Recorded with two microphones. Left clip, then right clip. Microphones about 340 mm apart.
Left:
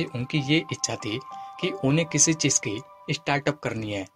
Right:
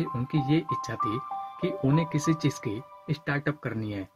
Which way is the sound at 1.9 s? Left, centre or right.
Left.